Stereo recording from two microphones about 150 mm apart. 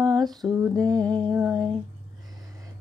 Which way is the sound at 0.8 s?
25° right (ahead or behind).